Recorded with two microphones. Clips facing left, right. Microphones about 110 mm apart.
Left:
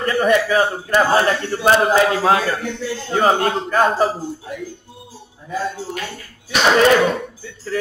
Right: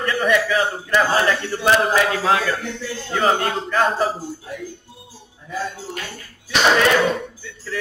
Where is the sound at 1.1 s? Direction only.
30° left (ahead or behind).